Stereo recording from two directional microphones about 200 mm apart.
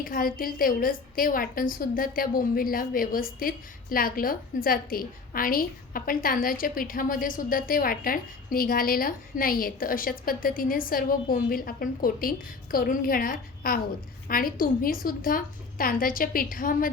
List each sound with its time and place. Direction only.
0.0 s a woman's voice: 45° left (ahead or behind)